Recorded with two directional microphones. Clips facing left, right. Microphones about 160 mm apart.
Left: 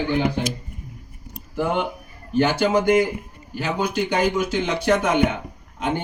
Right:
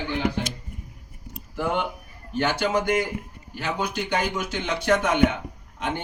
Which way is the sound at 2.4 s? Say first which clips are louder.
Left 5 dB; 10° left (ahead or behind).